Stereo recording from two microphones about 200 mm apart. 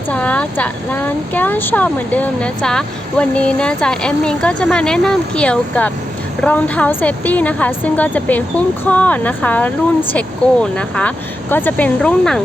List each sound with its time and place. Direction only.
0.1 s a woman's voice: 5° left (ahead or behind)